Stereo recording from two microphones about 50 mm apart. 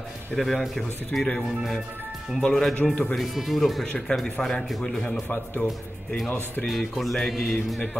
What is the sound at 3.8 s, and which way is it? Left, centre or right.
Speech, centre.